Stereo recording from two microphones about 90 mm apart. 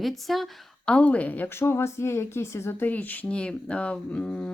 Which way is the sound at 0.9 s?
15° left (ahead or behind).